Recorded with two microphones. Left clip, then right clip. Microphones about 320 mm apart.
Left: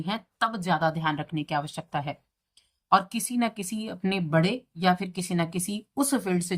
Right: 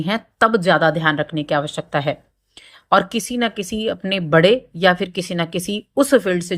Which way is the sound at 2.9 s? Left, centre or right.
Centre.